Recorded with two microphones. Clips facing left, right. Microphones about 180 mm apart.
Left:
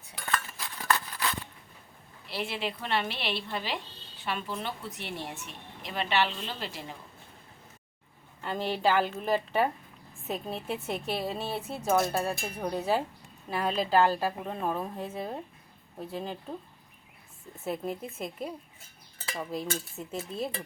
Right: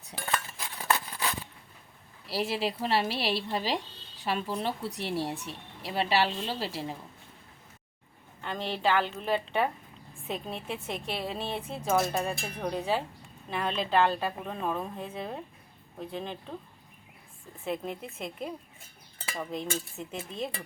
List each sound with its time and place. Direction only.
0.6 s a sound: 20° right (ahead or behind)
2.2 s speech: 35° right (ahead or behind)
8.4 s a woman's voice: 5° left (ahead or behind)
17.6 s speech: 5° left (ahead or behind)